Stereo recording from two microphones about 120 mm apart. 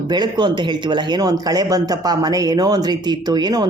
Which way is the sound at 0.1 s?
40° right (ahead or behind).